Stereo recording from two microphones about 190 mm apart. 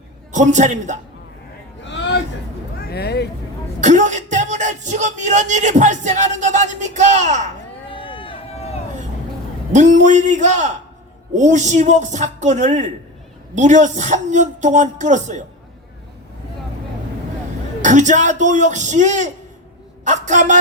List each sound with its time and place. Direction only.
0.3 s speech: 40° right (ahead or behind)
1.8 s a sound: 70° left (ahead or behind)
2.9 s vehicle: 60° left (ahead or behind)
3.8 s speech: 40° right (ahead or behind)
7.9 s run: 25° left (ahead or behind)
9.7 s speech: 40° right (ahead or behind)
17.8 s speech: 40° right (ahead or behind)